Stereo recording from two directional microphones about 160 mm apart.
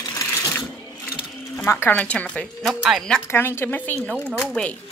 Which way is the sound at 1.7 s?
15° left (ahead or behind).